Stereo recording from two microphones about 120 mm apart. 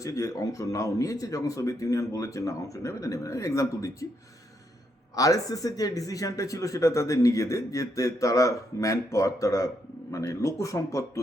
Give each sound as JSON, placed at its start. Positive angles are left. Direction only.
{"t": 0.0, "sound": "speech", "side_deg": 25}
{"t": 5.1, "sound": "speech", "side_deg": 30}